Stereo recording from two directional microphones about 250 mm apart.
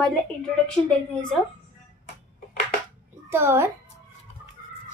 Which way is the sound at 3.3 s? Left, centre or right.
Centre.